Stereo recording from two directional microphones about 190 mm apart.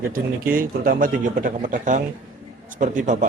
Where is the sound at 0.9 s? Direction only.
45° right (ahead or behind).